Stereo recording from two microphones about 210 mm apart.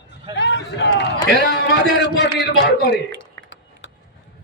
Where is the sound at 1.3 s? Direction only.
55° left (ahead or behind).